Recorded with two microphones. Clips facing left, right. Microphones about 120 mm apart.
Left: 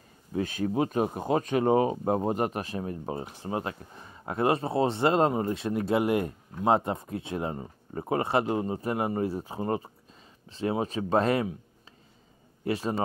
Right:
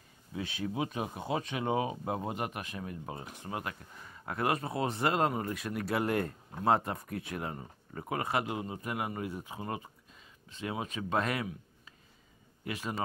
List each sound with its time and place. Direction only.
0.3 s speech: 45° left (ahead or behind)
12.6 s speech: 35° left (ahead or behind)